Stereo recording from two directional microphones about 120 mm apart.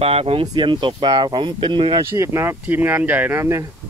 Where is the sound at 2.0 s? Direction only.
25° right (ahead or behind).